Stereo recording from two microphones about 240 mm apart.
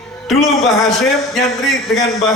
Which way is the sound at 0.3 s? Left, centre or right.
Centre.